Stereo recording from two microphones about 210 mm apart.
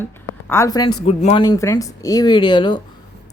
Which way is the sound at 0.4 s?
15° left (ahead or behind).